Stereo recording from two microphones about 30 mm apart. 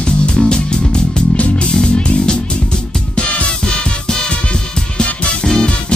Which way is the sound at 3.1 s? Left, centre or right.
Left.